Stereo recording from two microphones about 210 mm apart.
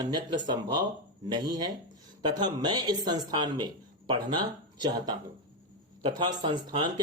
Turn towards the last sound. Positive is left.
turn(degrees=-20)  # may be behind; listen again after turning